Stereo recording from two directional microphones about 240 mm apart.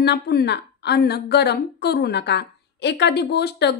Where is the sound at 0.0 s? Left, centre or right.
Left.